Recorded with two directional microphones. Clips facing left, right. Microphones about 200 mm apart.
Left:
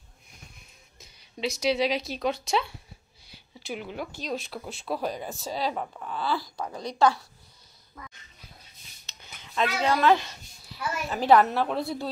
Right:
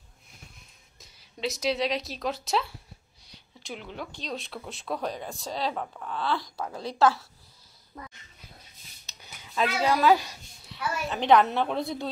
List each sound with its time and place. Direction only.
0.9 s speech: centre (ahead or behind)
8.0 s dog: 35° right (ahead or behind)
9.2 s speech: 10° right (ahead or behind)
10.6 s speech: 5° left (ahead or behind)